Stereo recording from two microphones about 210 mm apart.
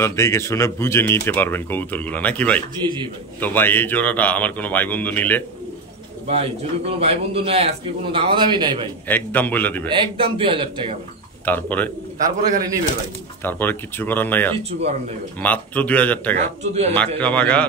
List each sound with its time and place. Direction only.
0.0 s speech: 15° left (ahead or behind)
2.8 s a man's voice: 20° right (ahead or behind)
3.3 s speech: 10° left (ahead or behind)
6.2 s a man's voice: 30° right (ahead or behind)
9.0 s speech: 10° left (ahead or behind)
9.8 s a man's voice: 25° right (ahead or behind)
11.4 s speech: 10° left (ahead or behind)
13.4 s speech: 10° left (ahead or behind)
16.3 s speech: 30° right (ahead or behind)
16.9 s a man's voice: 5° left (ahead or behind)